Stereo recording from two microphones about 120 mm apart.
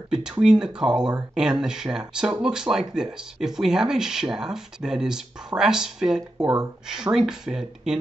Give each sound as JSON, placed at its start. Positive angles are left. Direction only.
{"t": 0.1, "sound": "speech", "side_deg": -5}